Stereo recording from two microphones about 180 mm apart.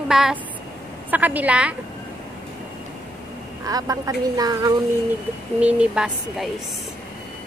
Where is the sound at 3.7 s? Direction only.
20° right (ahead or behind).